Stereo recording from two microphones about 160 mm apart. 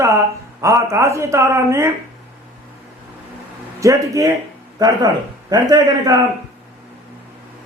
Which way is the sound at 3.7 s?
20° right (ahead or behind).